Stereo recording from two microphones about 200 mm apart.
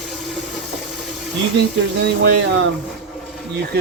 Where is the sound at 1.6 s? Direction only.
60° right (ahead or behind).